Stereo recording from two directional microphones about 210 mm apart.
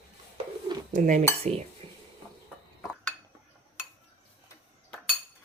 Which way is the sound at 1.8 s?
25° right (ahead or behind).